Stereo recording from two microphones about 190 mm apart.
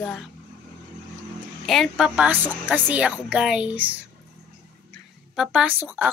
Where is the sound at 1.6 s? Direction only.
Centre (ahead or behind).